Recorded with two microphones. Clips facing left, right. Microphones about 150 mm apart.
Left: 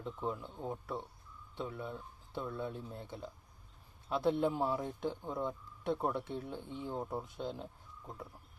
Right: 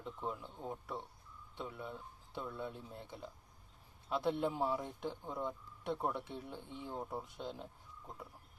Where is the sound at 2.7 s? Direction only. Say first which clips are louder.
Left 4 dB; 40° left (ahead or behind).